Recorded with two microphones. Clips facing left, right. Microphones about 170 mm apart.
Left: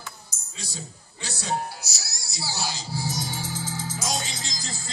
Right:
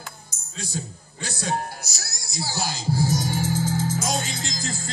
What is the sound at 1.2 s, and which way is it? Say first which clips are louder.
Speech: right 2 dB; 55° right (ahead or behind).